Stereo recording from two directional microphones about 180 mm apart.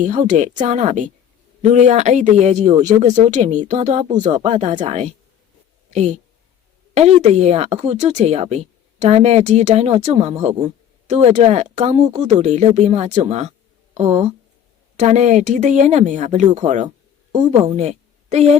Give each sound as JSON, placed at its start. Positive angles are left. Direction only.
{"t": 0.0, "sound": "a woman's voice", "side_deg": -45}